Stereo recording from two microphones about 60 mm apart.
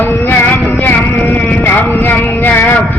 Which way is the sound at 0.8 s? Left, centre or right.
Left.